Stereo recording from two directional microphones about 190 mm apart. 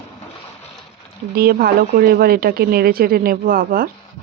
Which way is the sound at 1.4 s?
55° right (ahead or behind).